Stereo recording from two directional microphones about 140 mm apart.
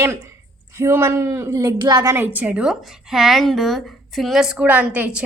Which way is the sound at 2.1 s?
15° right (ahead or behind).